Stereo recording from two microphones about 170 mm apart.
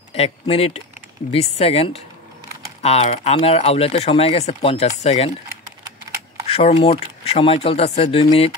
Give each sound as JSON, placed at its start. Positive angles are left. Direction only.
{"t": 0.1, "sound": "speech", "side_deg": 35}
{"t": 6.4, "sound": "speech", "side_deg": 35}